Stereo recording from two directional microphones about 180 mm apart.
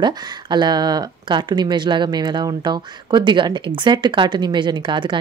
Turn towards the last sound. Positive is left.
turn(degrees=-25)  # may be behind; listen again after turning